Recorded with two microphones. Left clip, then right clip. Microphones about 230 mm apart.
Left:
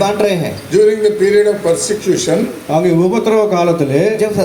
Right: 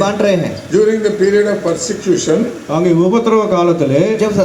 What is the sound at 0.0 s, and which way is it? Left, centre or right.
Speech, left.